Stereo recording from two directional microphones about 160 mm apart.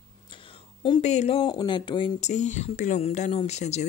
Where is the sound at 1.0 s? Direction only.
45° left (ahead or behind).